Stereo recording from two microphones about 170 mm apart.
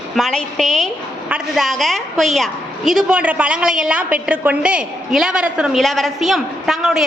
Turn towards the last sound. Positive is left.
turn(degrees=0)  # may be behind; listen again after turning